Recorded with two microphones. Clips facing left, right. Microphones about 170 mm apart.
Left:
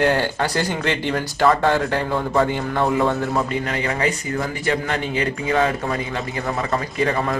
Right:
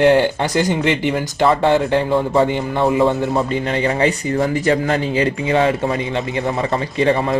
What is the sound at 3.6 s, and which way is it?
A man's voice, 30° right (ahead or behind).